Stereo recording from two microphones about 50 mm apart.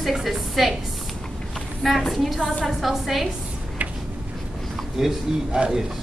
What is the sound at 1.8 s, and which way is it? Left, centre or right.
A woman's voice, centre.